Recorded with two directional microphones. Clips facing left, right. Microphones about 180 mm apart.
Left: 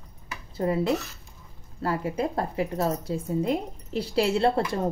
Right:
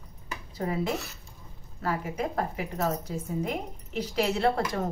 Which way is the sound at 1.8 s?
30° left (ahead or behind).